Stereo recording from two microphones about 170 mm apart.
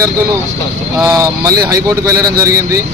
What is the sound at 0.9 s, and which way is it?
A man's voice, 15° right (ahead or behind).